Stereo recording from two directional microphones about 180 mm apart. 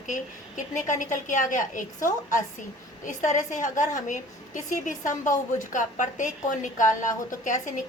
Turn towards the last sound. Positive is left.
turn(degrees=45)  # may be behind; listen again after turning